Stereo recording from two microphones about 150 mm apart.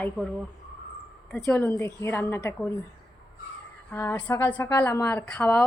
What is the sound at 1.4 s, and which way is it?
A woman's voice, 15° left (ahead or behind).